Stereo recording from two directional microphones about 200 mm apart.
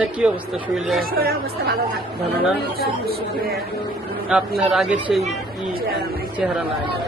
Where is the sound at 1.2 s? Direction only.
50° right (ahead or behind).